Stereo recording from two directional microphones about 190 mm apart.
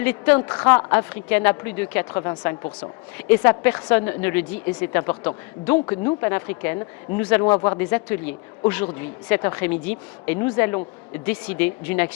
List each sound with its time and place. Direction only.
0.0 s speech: 10° left (ahead or behind)
6.0 s speech: 25° left (ahead or behind)
7.4 s speech: 20° left (ahead or behind)
10.4 s speech: 20° left (ahead or behind)
11.3 s speech: 10° left (ahead or behind)